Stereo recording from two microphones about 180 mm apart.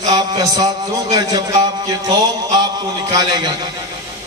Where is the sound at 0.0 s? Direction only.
20° right (ahead or behind).